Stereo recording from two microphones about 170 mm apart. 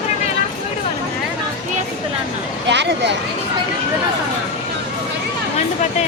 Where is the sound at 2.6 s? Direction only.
90° right.